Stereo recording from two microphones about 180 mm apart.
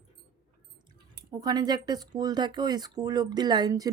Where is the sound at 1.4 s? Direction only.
25° right (ahead or behind).